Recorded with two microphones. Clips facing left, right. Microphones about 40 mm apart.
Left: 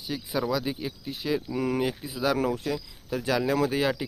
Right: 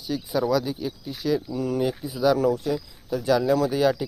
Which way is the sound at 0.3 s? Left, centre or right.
Centre.